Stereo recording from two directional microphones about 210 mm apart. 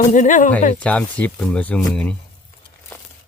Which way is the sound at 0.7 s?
5° left (ahead or behind).